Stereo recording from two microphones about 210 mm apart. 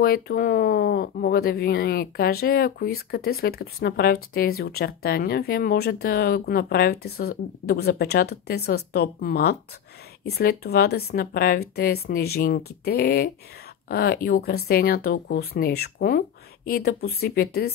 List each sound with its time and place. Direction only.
0.0 s speech: 45° left (ahead or behind)